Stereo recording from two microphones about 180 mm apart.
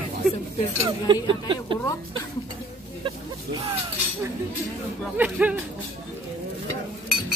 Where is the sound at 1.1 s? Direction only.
25° right (ahead or behind).